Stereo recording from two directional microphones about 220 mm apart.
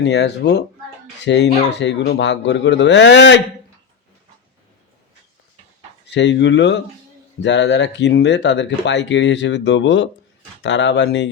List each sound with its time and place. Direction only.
0.0 s speech: 50° left (ahead or behind)
6.1 s speech: 55° left (ahead or behind)